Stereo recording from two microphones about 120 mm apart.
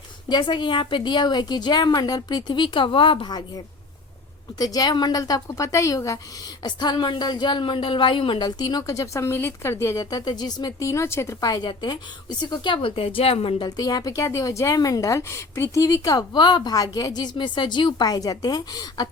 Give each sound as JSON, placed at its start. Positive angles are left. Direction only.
{"t": 0.3, "sound": "a woman's voice", "side_deg": 40}
{"t": 4.5, "sound": "a woman's voice", "side_deg": 30}
{"t": 13.7, "sound": "a woman's voice", "side_deg": 35}